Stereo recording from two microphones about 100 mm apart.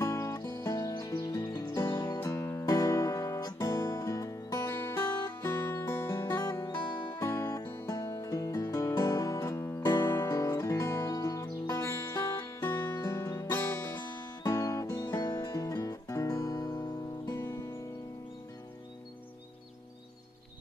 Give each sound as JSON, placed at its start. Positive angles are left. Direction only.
{"t": 0.0, "sound": "music", "side_deg": 30}
{"t": 2.1, "sound": "music", "side_deg": 25}
{"t": 2.7, "sound": "guitar", "side_deg": 35}
{"t": 3.6, "sound": "music", "side_deg": 40}
{"t": 6.4, "sound": "music", "side_deg": 40}
{"t": 12.6, "sound": "music", "side_deg": 20}
{"t": 13.1, "sound": "music", "side_deg": 30}
{"t": 14.1, "sound": "music", "side_deg": 40}